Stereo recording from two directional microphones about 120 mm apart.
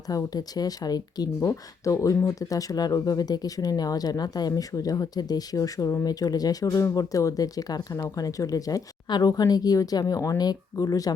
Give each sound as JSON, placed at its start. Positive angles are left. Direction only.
{"t": 0.1, "sound": "speech", "side_deg": 30}